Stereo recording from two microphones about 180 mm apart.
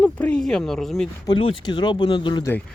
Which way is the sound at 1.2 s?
25° left (ahead or behind).